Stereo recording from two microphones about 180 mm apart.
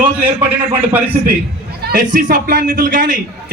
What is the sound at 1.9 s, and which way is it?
A man's voice, 50° right (ahead or behind).